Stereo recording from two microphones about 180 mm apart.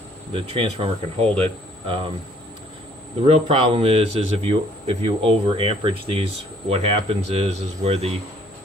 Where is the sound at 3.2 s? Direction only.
30° right (ahead or behind).